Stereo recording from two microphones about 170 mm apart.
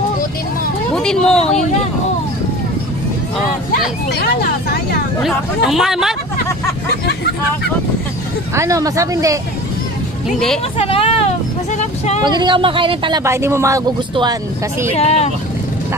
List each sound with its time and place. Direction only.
0.9 s speech: 5° left (ahead or behind)
4.1 s speech: 65° left (ahead or behind)
5.2 s speech: centre (ahead or behind)
8.5 s speech: 20° right (ahead or behind)
10.8 s vehicle: 35° left (ahead or behind)
12.2 s speech: 25° right (ahead or behind)
13.2 s speech: 15° right (ahead or behind)
15.0 s speech: 35° left (ahead or behind)